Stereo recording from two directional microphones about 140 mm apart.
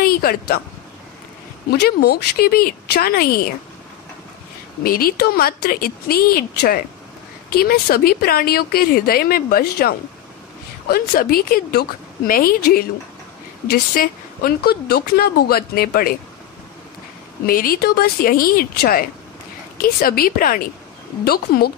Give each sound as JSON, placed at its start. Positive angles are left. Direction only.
{"t": 0.0, "sound": "speech", "side_deg": 90}
{"t": 1.7, "sound": "a woman's voice", "side_deg": 90}
{"t": 4.8, "sound": "a woman's voice", "side_deg": 90}
{"t": 13.9, "sound": "a woman's voice", "side_deg": 90}
{"t": 17.5, "sound": "a woman's voice", "side_deg": 90}